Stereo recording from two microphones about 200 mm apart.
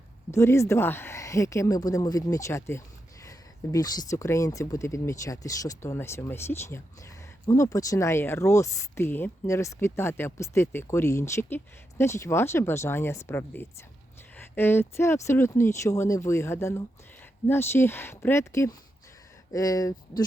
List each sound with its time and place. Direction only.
0.3 s speech: 15° left (ahead or behind)